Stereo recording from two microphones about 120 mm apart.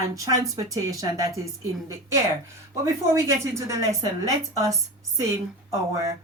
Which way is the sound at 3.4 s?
25° right (ahead or behind).